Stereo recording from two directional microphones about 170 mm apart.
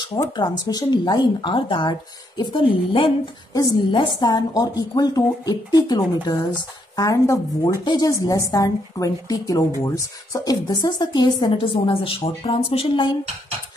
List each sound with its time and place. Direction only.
0.1 s speech: 20° left (ahead or behind)